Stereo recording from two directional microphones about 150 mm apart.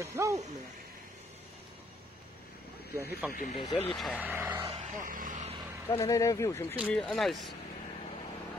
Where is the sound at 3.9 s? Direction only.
Centre (ahead or behind).